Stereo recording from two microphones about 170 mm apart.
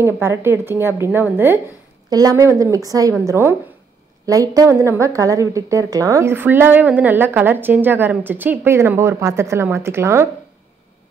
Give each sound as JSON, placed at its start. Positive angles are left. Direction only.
{"t": 0.0, "sound": "a woman's voice", "side_deg": -15}
{"t": 2.0, "sound": "a woman's voice", "side_deg": -20}